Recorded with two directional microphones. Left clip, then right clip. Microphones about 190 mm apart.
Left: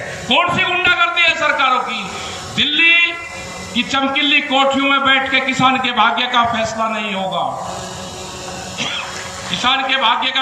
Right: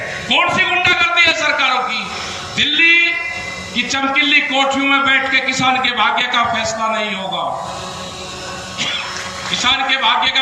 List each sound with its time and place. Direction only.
0.3 s a sound: 45° left (ahead or behind)
3.8 s a man's voice: 45° left (ahead or behind)
9.5 s a man's voice: 45° left (ahead or behind)